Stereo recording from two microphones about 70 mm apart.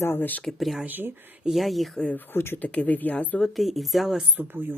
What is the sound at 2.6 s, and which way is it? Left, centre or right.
Speech, left.